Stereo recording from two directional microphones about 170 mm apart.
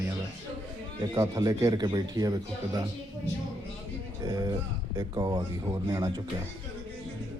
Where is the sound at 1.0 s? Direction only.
20° right (ahead or behind).